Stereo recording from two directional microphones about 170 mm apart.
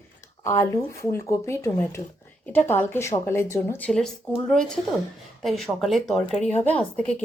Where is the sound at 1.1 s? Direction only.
15° left (ahead or behind).